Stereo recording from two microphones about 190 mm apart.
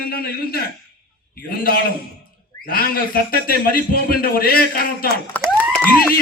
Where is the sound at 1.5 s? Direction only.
50° left (ahead or behind).